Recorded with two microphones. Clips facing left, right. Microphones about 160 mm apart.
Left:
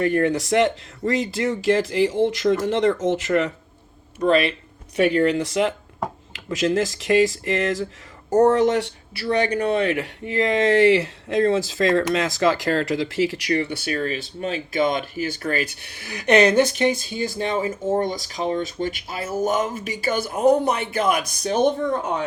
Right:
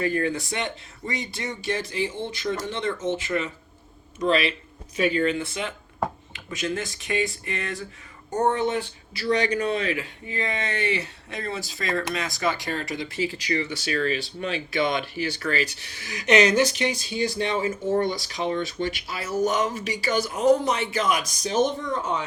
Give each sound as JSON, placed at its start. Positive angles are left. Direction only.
{"t": 0.0, "sound": "speech", "side_deg": 70}
{"t": 4.2, "sound": "speech", "side_deg": 55}
{"t": 4.9, "sound": "speech", "side_deg": 65}
{"t": 9.2, "sound": "speech", "side_deg": 55}
{"t": 13.5, "sound": "speech", "side_deg": 60}